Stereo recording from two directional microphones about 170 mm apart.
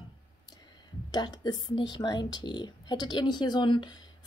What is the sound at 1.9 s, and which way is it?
A woman's voice, 25° left (ahead or behind).